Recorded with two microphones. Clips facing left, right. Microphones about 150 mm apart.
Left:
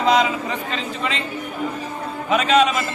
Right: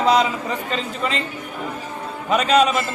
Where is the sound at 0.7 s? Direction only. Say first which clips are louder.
Right 1 dB; 40° right (ahead or behind).